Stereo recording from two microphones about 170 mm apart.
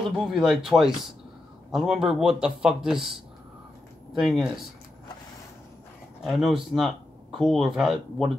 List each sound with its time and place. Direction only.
0.0 s speech: 5° right (ahead or behind)
4.2 s speech: centre (ahead or behind)
6.2 s speech: centre (ahead or behind)